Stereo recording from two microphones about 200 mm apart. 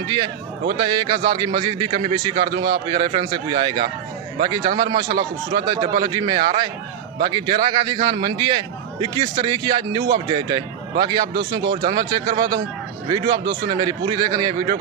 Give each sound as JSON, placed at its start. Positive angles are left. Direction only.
{"t": 0.0, "sound": "a man's voice", "side_deg": -20}
{"t": 13.4, "sound": "speech", "side_deg": -50}
{"t": 13.7, "sound": "a man's voice", "side_deg": -20}